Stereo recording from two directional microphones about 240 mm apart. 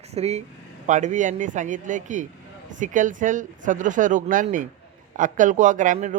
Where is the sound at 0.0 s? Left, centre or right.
Right.